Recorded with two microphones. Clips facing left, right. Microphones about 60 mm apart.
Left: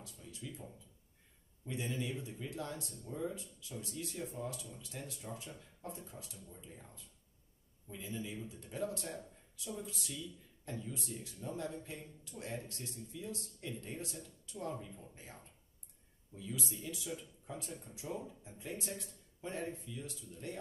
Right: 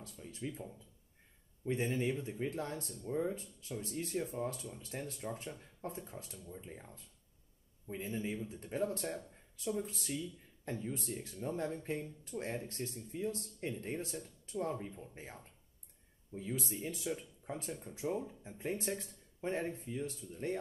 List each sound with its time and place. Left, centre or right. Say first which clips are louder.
0.0 s speech: right 6 dB; right
1.7 s speech: right 5 dB; right
7.9 s speech: right 5 dB; right
16.3 s speech: right 4 dB; right